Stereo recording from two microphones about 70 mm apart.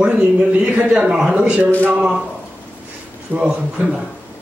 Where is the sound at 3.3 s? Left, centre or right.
Centre.